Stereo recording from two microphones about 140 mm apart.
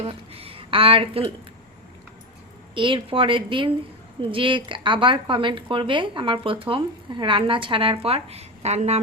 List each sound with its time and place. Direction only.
0.0 s speech: 40° right (ahead or behind)
2.7 s speech: 35° right (ahead or behind); by 9.0 s 55° right (ahead or behind)